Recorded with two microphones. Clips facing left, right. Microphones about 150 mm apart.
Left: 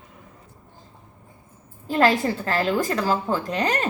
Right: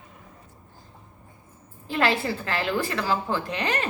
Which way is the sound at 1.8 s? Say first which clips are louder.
Left 5 dB; 40° left (ahead or behind).